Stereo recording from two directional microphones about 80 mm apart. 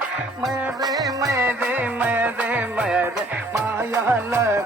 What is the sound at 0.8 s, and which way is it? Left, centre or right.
Music, right.